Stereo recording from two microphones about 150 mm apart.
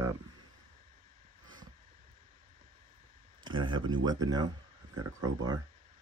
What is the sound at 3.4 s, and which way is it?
Speech, 30° right (ahead or behind).